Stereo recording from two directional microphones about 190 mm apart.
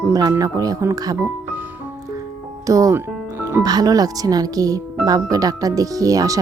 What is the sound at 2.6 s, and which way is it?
Speech, 15° right (ahead or behind).